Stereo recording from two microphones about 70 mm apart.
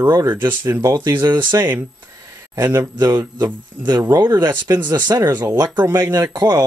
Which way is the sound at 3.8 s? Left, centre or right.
Right.